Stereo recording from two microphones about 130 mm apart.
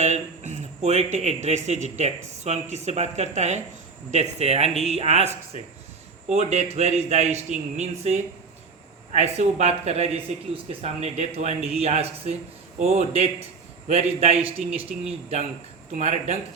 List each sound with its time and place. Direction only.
0.0 s a man's voice: 65° right (ahead or behind)